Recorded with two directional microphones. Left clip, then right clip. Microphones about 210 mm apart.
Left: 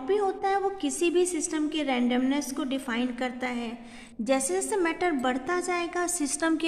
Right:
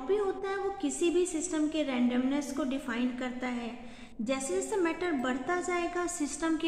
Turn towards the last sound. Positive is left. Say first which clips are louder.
# left 5 dB
turn(degrees=55)  # may be behind; listen again after turning